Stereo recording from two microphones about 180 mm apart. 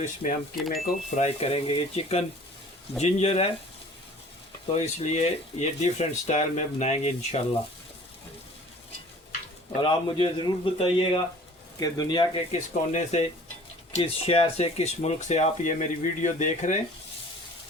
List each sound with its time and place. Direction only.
0.0 s speech: 45° left (ahead or behind)
0.5 s speech: centre (ahead or behind)
1.1 s speech: 35° left (ahead or behind)
4.7 s speech: 40° left (ahead or behind)
9.8 s a man's voice: 30° left (ahead or behind)
12.5 s speech: 40° left (ahead or behind)